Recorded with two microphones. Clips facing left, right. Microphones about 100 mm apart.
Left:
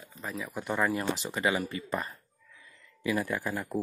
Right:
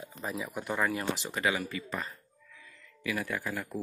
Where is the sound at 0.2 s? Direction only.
10° right (ahead or behind).